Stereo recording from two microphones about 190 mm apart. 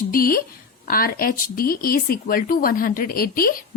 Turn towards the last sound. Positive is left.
turn(degrees=50)  # may be behind; listen again after turning